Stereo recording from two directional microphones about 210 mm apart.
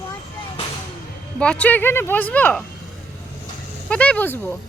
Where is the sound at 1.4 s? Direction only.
5° left (ahead or behind).